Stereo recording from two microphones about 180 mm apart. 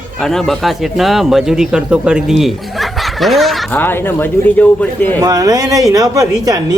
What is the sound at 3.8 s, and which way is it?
Speech, 10° left (ahead or behind).